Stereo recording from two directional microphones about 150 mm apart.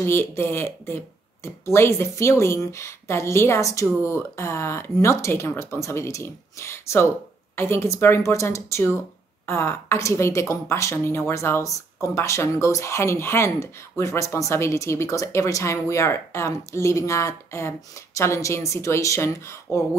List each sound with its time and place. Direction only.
0.0 s speech: 15° left (ahead or behind)